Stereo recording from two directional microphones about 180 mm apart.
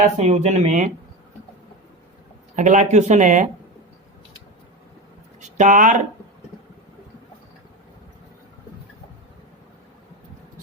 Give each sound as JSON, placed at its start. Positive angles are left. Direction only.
{"t": 0.2, "sound": "speech", "side_deg": -40}
{"t": 2.6, "sound": "speech", "side_deg": -40}
{"t": 5.4, "sound": "speech", "side_deg": -45}